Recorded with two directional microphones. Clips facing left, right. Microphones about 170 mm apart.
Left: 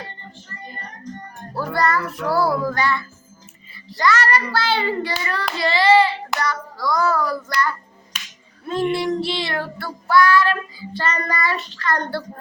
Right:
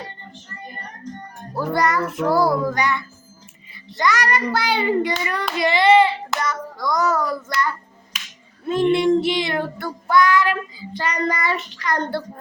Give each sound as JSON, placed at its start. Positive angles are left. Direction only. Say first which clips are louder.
{"t": 1.5, "sound": "child singing", "louder": "right 1 dB", "side_deg": -20}
{"t": 2.6, "sound": "music", "louder": "even", "side_deg": -20}
{"t": 3.8, "sound": "child singing", "louder": "left 1 dB", "side_deg": -20}
{"t": 6.4, "sound": "a child's voice", "louder": "left 1 dB", "side_deg": -20}
{"t": 8.6, "sound": "child singing", "louder": "right 4 dB", "side_deg": -20}